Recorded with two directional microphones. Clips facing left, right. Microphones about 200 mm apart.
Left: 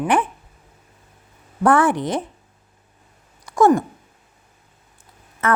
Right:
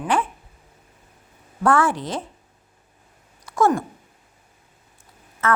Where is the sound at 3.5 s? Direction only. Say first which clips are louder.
Left 4 dB; 15° left (ahead or behind).